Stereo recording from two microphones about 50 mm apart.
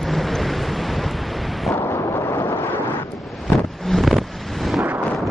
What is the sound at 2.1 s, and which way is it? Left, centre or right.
Vehicle, left.